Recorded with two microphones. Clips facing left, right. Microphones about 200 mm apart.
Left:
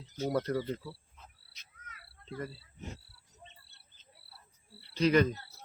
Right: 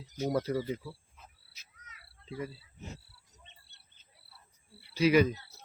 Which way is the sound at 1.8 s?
50° left (ahead or behind).